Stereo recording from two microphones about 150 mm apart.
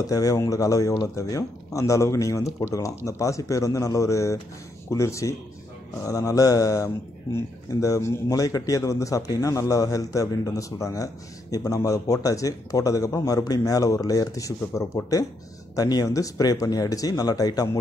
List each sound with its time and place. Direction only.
0.0 s speech: 25° left (ahead or behind)